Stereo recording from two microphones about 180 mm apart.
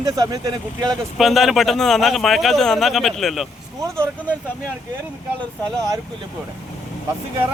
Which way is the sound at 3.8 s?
15° right (ahead or behind).